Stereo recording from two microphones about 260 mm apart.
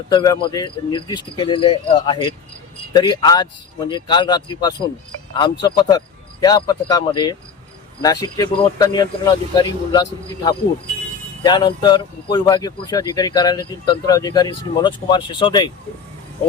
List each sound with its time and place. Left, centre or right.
0.1 s speech: centre